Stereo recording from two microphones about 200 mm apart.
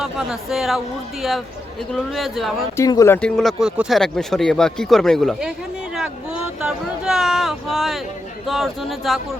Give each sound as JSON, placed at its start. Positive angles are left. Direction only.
{"t": 0.0, "sound": "speech", "side_deg": 0}
{"t": 1.9, "sound": "speech", "side_deg": 0}
{"t": 2.7, "sound": "speech", "side_deg": 15}
{"t": 3.2, "sound": "speech", "side_deg": 5}